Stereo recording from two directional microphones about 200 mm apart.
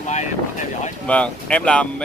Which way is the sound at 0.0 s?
35° left (ahead or behind).